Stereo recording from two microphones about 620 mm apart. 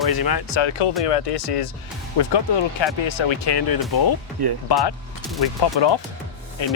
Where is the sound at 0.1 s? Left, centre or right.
Left.